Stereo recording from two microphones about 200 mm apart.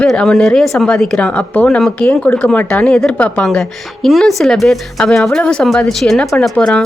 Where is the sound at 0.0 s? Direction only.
5° left (ahead or behind).